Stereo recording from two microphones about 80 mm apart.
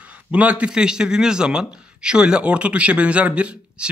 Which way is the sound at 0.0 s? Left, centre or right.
Centre.